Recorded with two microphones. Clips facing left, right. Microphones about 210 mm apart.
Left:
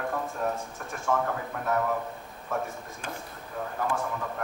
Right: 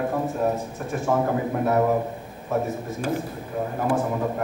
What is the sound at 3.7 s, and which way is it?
Speech, 25° right (ahead or behind).